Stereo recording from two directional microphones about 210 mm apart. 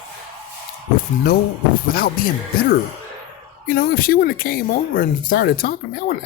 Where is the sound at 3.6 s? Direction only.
45° left (ahead or behind).